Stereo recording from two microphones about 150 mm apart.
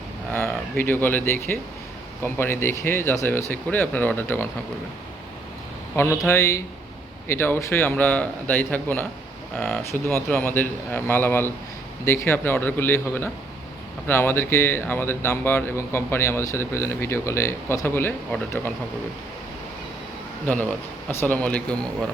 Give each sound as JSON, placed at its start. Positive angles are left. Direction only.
{"t": 0.3, "sound": "speech", "side_deg": 15}
{"t": 6.0, "sound": "speech", "side_deg": 15}
{"t": 20.4, "sound": "speech", "side_deg": 10}